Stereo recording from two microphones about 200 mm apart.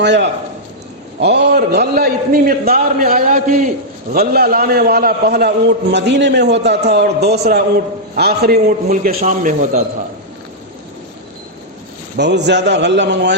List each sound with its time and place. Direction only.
0.0 s a man's voice: 60° right (ahead or behind); by 3.7 s 40° right (ahead or behind)
4.1 s a man's voice: 50° right (ahead or behind)
12.1 s a man's voice: 60° right (ahead or behind)